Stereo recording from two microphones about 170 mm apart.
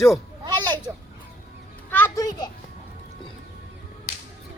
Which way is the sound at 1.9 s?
15° left (ahead or behind).